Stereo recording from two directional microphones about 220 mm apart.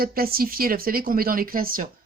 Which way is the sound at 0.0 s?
40° right (ahead or behind).